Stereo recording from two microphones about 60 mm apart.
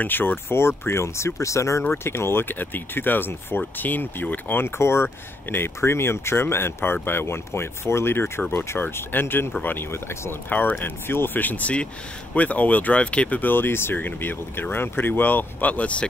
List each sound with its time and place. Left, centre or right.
0.0 s speech: left
1.8 s speech: left
10.5 s speech: left